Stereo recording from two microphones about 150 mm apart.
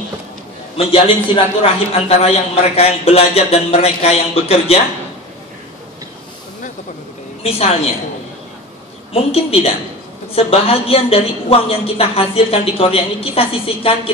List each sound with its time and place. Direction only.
0.7 s a man's voice: 40° left (ahead or behind)
7.4 s a man's voice: 40° left (ahead or behind)
9.1 s a woman's voice: 40° left (ahead or behind)